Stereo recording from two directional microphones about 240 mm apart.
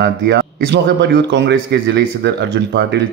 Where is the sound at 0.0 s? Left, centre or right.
Right.